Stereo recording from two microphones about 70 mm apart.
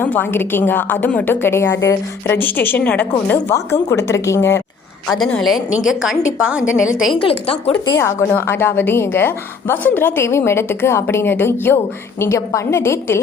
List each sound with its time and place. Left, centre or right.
0.0 s a woman's voice: left
3.5 s speech: left
5.4 s a woman's voice: centre
7.9 s a woman's voice: left